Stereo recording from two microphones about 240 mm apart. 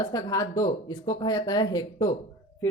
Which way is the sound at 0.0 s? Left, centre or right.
Centre.